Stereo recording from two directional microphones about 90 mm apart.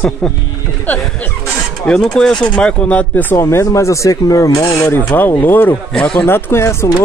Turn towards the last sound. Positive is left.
turn(degrees=30)  # may be behind; listen again after turning